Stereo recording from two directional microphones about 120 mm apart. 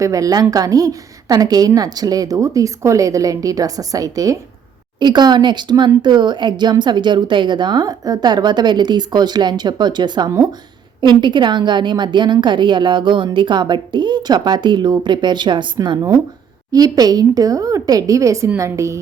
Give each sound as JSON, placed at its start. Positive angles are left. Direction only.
{"t": 0.0, "sound": "a woman's voice", "side_deg": -30}
{"t": 4.9, "sound": "a woman's voice", "side_deg": -40}